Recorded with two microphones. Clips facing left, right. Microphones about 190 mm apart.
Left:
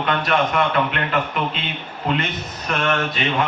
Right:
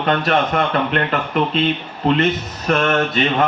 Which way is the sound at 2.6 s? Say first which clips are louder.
Right 5 dB; 40° right (ahead or behind).